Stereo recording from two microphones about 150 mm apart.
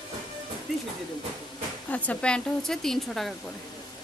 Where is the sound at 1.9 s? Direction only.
10° left (ahead or behind).